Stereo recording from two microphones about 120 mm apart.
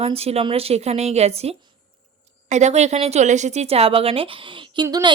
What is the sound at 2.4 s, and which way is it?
A woman's voice, 75° right (ahead or behind).